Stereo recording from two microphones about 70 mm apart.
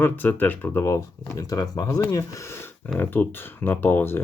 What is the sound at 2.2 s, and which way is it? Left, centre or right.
Speech, left.